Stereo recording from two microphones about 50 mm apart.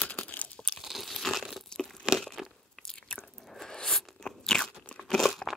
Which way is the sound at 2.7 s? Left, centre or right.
Centre.